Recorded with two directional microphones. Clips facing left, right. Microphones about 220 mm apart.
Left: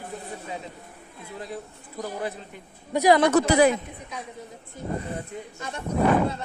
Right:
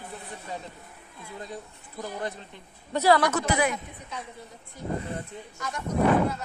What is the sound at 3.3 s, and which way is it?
Speech, 35° left (ahead or behind).